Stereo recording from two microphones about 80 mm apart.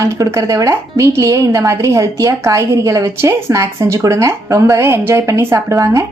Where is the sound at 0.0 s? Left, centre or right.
Right.